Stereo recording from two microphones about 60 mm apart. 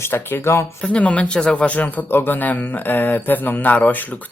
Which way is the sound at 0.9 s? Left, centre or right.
Left.